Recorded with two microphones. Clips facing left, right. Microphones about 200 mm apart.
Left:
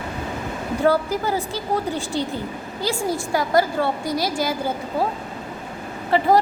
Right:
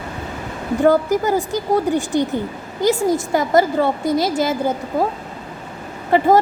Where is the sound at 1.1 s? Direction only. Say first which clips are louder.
Right 6 dB; 15° right (ahead or behind).